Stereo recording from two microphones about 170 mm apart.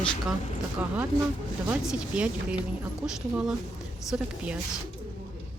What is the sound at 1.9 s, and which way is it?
Speech, 5° right (ahead or behind).